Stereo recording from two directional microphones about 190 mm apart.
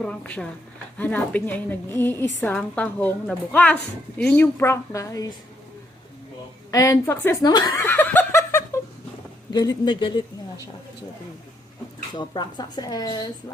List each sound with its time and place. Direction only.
0.0 s a woman's voice: 5° left (ahead or behind)
6.7 s chuckle: 20° left (ahead or behind)
9.5 s speech: 20° left (ahead or behind)
12.1 s speech: 20° left (ahead or behind)